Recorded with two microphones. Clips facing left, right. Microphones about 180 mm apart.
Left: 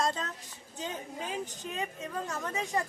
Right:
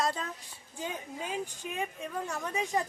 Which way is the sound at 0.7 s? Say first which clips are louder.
Even; 15° right (ahead or behind).